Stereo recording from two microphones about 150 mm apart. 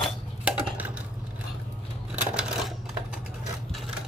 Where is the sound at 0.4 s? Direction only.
5° right (ahead or behind).